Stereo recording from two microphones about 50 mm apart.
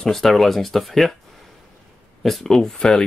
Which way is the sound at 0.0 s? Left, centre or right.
Centre.